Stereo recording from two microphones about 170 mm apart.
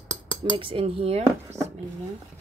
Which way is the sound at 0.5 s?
30° right (ahead or behind).